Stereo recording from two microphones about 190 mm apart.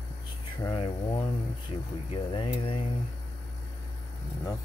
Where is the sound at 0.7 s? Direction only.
25° left (ahead or behind).